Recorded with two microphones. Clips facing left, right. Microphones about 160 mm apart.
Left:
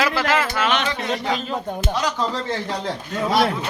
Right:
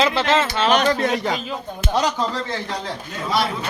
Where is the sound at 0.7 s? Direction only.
45° right (ahead or behind).